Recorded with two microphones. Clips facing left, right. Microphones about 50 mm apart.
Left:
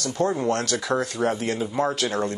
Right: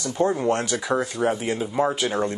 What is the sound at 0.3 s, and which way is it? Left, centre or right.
Speech, centre.